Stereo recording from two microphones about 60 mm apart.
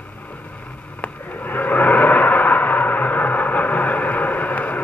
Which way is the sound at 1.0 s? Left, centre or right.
Left.